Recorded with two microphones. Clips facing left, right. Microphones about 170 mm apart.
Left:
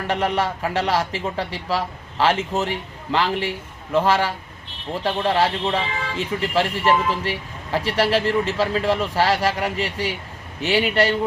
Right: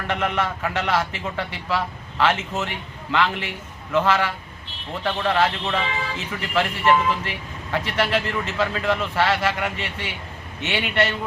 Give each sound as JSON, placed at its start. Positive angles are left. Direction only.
{"t": 0.1, "sound": "speech", "side_deg": 35}